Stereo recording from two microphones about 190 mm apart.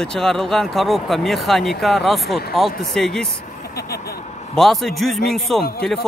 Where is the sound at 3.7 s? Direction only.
55° left (ahead or behind).